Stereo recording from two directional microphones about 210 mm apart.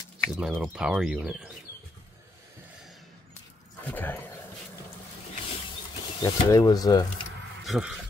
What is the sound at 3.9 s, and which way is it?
Speech, 10° left (ahead or behind).